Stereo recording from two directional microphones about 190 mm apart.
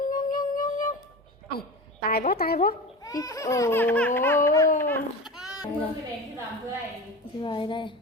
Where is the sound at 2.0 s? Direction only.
50° left (ahead or behind).